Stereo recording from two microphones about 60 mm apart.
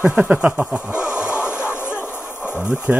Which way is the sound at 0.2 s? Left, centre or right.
Centre.